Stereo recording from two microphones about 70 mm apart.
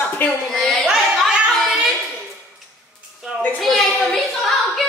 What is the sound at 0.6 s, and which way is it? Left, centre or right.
Speech, centre.